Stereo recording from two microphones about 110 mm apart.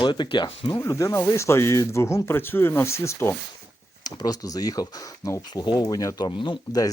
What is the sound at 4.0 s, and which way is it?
Speech, 35° left (ahead or behind).